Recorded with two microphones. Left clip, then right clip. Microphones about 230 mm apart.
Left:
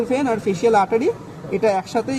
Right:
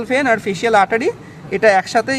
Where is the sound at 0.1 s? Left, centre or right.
Right.